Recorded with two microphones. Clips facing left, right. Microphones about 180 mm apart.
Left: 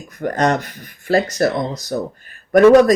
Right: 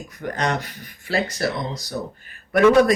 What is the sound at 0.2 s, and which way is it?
Speech, 45° left (ahead or behind).